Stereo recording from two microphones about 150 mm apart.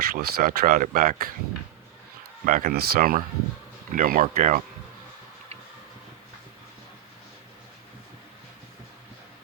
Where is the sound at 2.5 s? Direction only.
75° right (ahead or behind).